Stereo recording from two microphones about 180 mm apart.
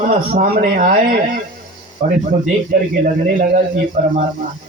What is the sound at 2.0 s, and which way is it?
Speech, 50° right (ahead or behind).